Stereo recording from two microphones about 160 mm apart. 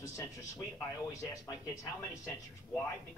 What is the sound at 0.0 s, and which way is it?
Speech, 20° left (ahead or behind).